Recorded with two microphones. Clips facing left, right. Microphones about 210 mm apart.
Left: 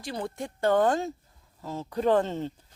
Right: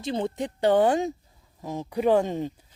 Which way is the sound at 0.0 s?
25° right (ahead or behind).